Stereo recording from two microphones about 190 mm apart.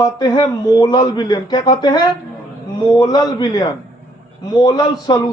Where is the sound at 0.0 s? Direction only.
20° left (ahead or behind).